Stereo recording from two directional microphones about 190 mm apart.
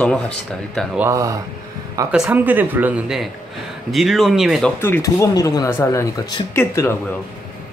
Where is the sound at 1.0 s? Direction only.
15° right (ahead or behind).